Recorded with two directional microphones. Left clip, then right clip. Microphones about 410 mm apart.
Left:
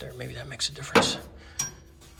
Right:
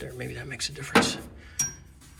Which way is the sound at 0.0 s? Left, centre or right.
Centre.